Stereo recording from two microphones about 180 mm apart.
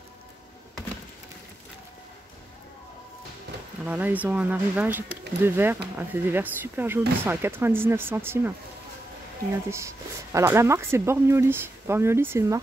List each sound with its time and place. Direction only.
3.8 s speech: 10° right (ahead or behind)
9.7 s speech: 15° right (ahead or behind)